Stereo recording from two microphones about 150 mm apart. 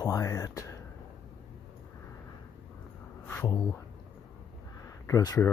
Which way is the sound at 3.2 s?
15° left (ahead or behind).